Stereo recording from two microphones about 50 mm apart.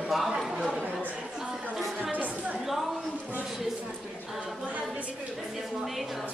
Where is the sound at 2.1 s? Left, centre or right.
Right.